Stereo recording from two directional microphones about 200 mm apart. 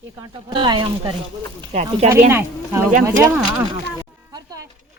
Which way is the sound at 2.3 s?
10° right (ahead or behind).